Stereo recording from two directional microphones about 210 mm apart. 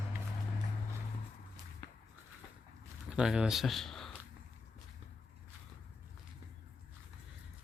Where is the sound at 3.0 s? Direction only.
5° right (ahead or behind).